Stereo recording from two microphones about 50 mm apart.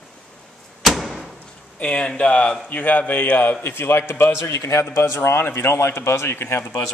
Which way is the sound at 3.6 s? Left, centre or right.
Left.